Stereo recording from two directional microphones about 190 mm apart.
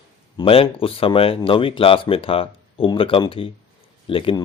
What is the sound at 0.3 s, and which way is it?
Speech, 30° left (ahead or behind).